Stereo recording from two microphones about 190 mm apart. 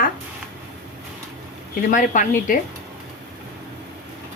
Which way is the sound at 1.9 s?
40° left (ahead or behind).